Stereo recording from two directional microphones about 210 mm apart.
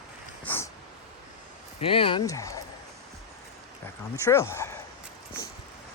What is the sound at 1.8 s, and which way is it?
Speech, 25° left (ahead or behind).